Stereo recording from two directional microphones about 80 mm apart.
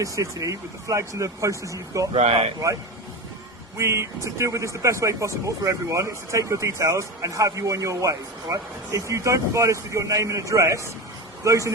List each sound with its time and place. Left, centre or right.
0.0 s speech: right
3.8 s speech: right